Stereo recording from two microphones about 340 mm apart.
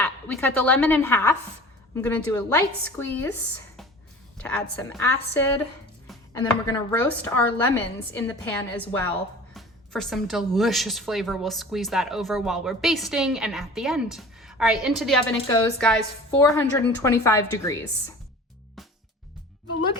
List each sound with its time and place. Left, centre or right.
0.0 s a woman's voice: centre
4.4 s a woman's voice: centre